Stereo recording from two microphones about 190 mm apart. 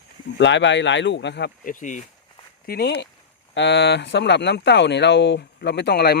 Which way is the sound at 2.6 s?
55° left (ahead or behind).